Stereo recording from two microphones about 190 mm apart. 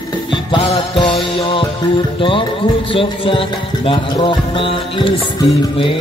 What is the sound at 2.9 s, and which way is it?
Music, 30° left (ahead or behind).